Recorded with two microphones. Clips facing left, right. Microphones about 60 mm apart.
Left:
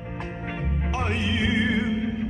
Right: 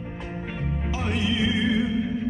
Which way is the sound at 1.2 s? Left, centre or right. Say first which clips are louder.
Right 3 dB; centre.